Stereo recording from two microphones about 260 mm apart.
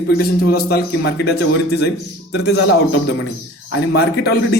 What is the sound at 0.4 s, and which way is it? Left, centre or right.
Speech, left.